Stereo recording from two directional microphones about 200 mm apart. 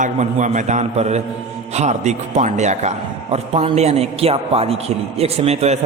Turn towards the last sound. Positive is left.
turn(degrees=-30)  # may be behind; listen again after turning